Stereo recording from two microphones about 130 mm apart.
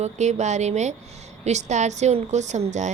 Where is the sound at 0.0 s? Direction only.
60° right (ahead or behind).